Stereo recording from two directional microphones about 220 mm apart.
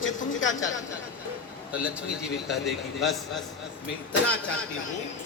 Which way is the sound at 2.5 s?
Centre (ahead or behind).